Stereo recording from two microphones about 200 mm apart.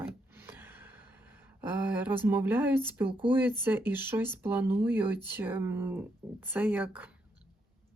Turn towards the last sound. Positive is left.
turn(degrees=-10)  # may be behind; listen again after turning